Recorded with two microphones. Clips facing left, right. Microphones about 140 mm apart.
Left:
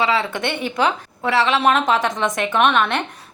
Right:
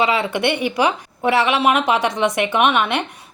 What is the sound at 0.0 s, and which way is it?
A woman's voice, 15° right (ahead or behind).